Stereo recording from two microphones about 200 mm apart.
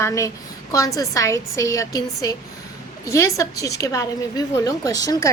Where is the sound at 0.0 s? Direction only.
15° left (ahead or behind).